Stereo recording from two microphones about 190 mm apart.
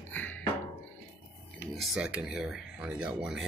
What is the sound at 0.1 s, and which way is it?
Music, 10° left (ahead or behind).